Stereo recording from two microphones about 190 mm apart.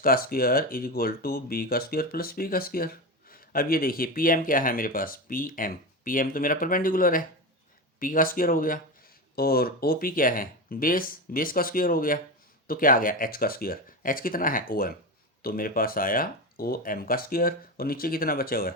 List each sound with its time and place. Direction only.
0.0 s speech: 50° left (ahead or behind)